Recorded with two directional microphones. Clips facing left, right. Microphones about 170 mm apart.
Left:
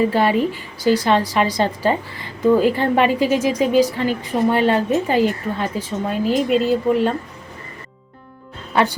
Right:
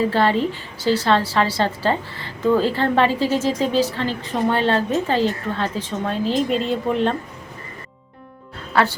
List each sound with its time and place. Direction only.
0.0 s a woman's voice: 15° left (ahead or behind)
8.7 s a woman's voice: 20° left (ahead or behind)